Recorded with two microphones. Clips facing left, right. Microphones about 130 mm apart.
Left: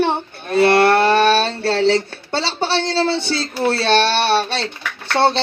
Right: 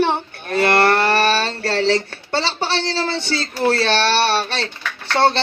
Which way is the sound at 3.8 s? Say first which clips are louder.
Left 1 dB; 15° left (ahead or behind).